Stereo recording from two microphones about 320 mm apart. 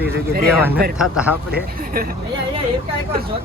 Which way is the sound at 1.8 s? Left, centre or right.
Right.